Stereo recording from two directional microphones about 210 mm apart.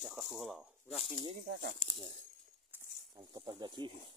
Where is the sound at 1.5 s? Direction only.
50° right (ahead or behind).